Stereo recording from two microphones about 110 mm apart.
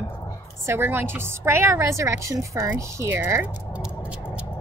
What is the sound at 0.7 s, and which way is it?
A woman's voice, 20° right (ahead or behind).